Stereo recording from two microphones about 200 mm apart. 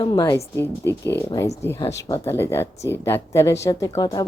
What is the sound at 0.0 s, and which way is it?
A woman's voice, 20° left (ahead or behind).